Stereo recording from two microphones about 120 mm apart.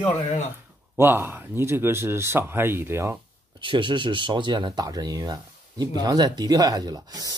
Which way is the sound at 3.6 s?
40° right (ahead or behind).